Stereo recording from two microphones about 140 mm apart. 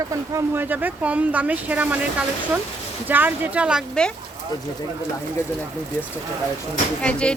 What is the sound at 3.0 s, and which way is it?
Speech, 15° right (ahead or behind).